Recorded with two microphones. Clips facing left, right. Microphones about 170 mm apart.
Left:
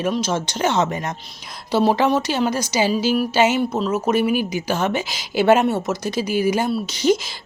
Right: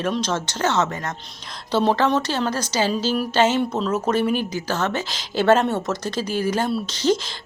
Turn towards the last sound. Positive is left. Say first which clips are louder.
# left 2 dB
turn(degrees=10)  # may be behind; listen again after turning